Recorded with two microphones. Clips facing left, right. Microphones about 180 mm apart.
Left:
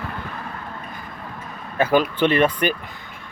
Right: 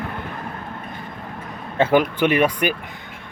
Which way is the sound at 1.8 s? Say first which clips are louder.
Right 1 dB; 20° right (ahead or behind).